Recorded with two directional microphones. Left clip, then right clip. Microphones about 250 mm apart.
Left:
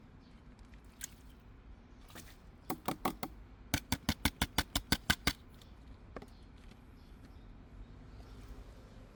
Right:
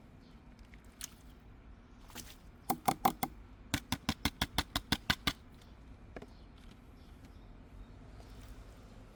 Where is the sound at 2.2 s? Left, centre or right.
Right.